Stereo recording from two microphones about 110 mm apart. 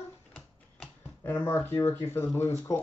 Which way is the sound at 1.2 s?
20° left (ahead or behind).